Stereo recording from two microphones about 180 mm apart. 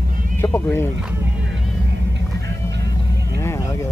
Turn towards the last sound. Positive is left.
turn(degrees=15)  # may be behind; listen again after turning